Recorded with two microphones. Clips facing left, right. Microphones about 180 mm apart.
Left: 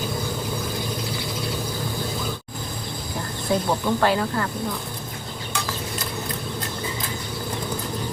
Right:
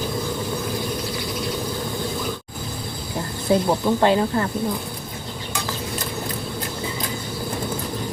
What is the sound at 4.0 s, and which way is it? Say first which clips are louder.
Speech: right 3 dB; 20° right (ahead or behind).